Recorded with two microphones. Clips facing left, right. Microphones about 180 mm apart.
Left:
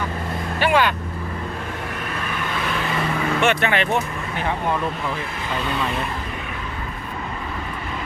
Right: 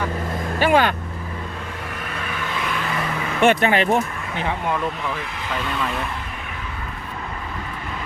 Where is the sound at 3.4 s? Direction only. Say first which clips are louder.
Right 5 dB; 40° right (ahead or behind).